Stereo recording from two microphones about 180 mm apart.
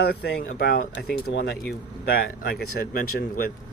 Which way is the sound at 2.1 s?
55° left (ahead or behind).